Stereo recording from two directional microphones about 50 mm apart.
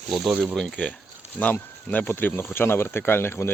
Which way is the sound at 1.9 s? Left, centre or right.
Left.